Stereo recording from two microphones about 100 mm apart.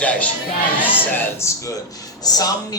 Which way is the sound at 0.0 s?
15° left (ahead or behind).